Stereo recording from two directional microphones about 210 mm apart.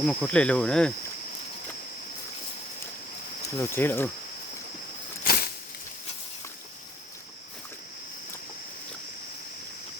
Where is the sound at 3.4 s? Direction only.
10° left (ahead or behind).